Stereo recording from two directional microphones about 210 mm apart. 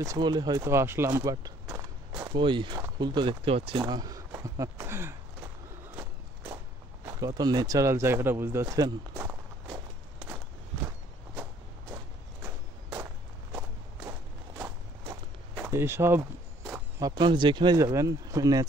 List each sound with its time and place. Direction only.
0.0 s speech: 20° right (ahead or behind)
7.1 s speech: 15° right (ahead or behind)
12.4 s walk: 15° right (ahead or behind)
17.0 s speech: 20° right (ahead or behind)